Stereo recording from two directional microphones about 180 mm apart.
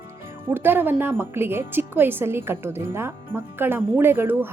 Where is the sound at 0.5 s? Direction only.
10° right (ahead or behind).